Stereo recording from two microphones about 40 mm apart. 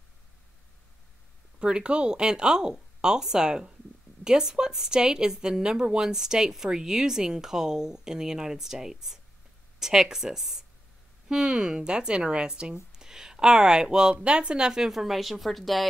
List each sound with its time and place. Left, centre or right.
1.6 s speech: right
14.7 s a woman's voice: centre